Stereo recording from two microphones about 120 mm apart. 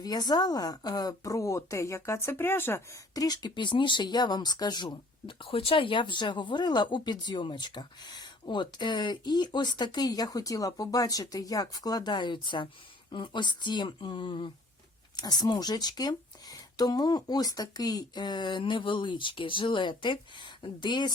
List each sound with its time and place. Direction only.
0.0 s speech: 35° left (ahead or behind); by 2.8 s 20° left (ahead or behind)
3.2 s speech: 35° left (ahead or behind)